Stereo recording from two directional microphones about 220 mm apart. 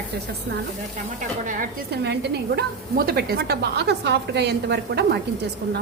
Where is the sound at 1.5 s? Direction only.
35° right (ahead or behind).